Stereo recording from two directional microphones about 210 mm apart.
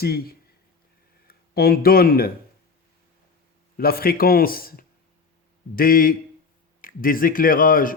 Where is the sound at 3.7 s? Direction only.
45° left (ahead or behind).